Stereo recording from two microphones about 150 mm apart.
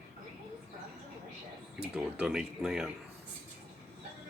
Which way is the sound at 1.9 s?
5° right (ahead or behind).